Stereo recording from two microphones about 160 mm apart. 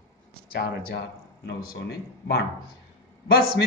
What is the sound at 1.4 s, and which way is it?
Speech, 90° left.